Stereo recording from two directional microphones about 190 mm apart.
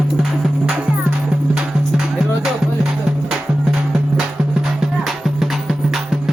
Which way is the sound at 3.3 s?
Centre (ahead or behind).